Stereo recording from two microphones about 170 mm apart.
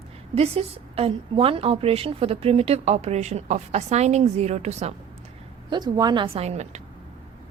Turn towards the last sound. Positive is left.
turn(degrees=-40)  # may be behind; listen again after turning